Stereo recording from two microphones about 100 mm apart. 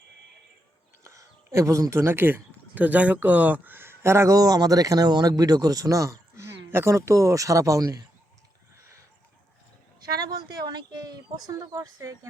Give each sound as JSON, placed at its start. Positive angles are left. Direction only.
{"t": 1.0, "sound": "speech", "side_deg": -30}
{"t": 10.2, "sound": "speech", "side_deg": -40}